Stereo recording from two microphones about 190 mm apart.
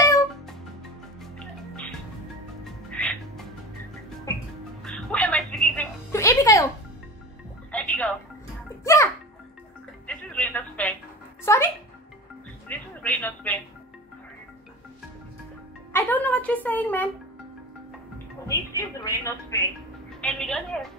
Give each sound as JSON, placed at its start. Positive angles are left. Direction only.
{"t": 2.6, "sound": "music", "side_deg": 5}
{"t": 4.3, "sound": "music", "side_deg": 15}
{"t": 4.8, "sound": "music", "side_deg": 5}
{"t": 6.1, "sound": "music", "side_deg": 15}
{"t": 7.7, "sound": "music", "side_deg": 5}
{"t": 15.9, "sound": "music", "side_deg": 10}
{"t": 18.5, "sound": "music", "side_deg": 15}
{"t": 20.2, "sound": "music", "side_deg": 5}